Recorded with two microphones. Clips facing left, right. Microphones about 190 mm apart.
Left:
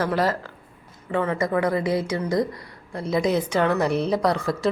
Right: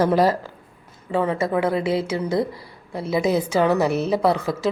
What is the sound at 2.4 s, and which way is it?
A woman's voice, 5° right (ahead or behind).